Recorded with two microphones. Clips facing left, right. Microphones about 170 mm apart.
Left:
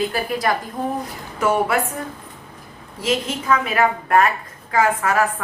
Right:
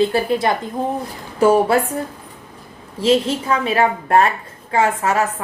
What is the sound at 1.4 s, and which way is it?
Speech, 30° right (ahead or behind).